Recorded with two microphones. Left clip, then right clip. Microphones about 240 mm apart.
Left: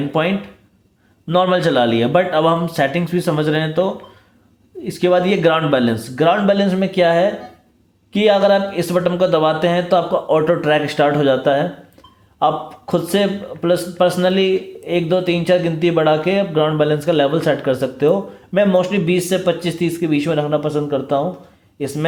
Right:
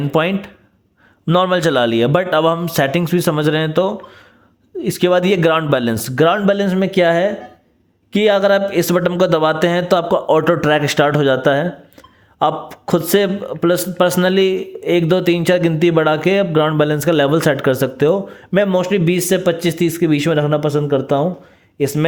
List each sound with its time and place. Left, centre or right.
0.1 s a man's voice: right